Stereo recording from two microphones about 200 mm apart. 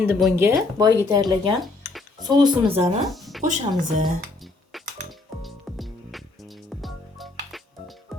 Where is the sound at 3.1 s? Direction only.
Centre (ahead or behind).